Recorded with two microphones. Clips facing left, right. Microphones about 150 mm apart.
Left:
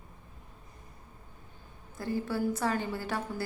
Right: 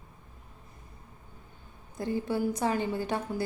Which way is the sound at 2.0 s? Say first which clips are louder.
Right 2 dB; 20° right (ahead or behind).